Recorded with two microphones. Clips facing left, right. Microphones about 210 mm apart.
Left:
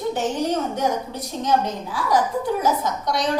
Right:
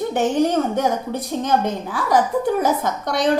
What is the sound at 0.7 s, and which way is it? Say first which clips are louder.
A woman's voice: right 3 dB; 55° right (ahead or behind).